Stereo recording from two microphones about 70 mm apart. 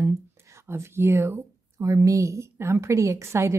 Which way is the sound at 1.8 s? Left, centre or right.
Right.